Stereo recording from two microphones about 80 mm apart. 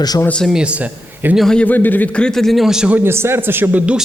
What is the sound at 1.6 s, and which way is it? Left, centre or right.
A man's voice, left.